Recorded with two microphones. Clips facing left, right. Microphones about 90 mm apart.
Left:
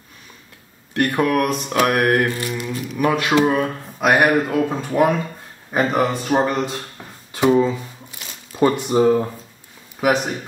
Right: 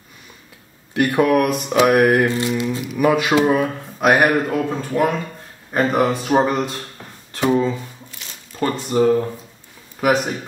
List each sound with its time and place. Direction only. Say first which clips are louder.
0.9 s speech: right 2 dB; 5° right (ahead or behind)
1.3 s mantra: right 3 dB; 5° right (ahead or behind)
2.2 s mantra: right 4 dB; 20° right (ahead or behind)
2.9 s speech: right 1 dB; 5° right (ahead or behind)
7.3 s shuffling cards: left 2 dB; 5° left (ahead or behind)
8.5 s speech: left 2 dB; 15° left (ahead or behind)
9.9 s speech: right 1 dB; centre (ahead or behind)